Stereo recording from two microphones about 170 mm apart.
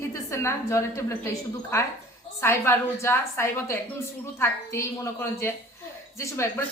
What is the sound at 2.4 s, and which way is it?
A woman's voice, 15° left (ahead or behind).